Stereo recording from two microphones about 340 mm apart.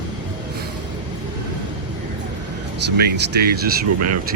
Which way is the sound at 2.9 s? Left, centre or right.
Right.